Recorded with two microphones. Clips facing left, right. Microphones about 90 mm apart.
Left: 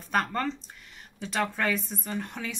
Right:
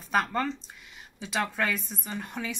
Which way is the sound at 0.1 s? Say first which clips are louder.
Right 1 dB; 5° right (ahead or behind).